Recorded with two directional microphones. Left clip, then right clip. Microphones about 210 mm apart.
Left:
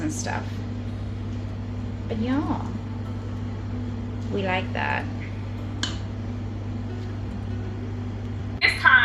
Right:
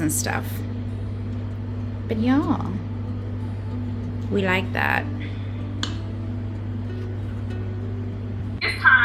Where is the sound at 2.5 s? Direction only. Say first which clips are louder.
Right 4 dB; 50° right (ahead or behind).